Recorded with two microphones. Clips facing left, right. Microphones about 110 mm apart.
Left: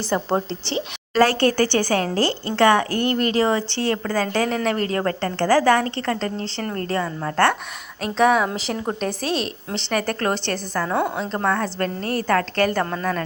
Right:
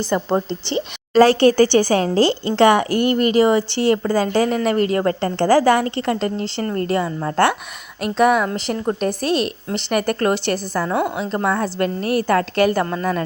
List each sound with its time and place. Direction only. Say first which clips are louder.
0.1 s a woman's voice: right 1 dB; centre (ahead or behind)
1.1 s a woman's voice: right 5 dB; 15° right (ahead or behind)
5.0 s a woman's voice: right 3 dB; 20° right (ahead or behind)
8.0 s a woman's voice: right 2 dB; 5° right (ahead or behind)